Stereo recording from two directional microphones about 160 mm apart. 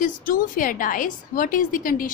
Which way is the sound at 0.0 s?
60° left (ahead or behind).